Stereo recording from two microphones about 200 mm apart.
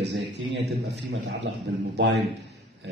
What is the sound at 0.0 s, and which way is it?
Speech, 60° right (ahead or behind).